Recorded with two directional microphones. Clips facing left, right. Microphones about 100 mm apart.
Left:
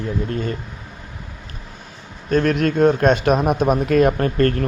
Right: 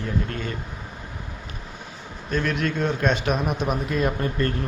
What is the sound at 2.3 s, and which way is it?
A man's voice, 45° left (ahead or behind).